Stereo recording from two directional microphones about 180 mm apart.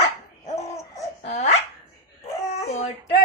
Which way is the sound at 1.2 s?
40° left (ahead or behind).